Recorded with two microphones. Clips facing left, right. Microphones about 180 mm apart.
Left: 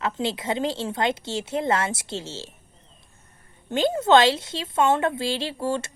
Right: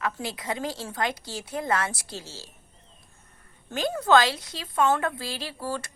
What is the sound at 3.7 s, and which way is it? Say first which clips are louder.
A woman's voice: left 3 dB; 25° left (ahead or behind).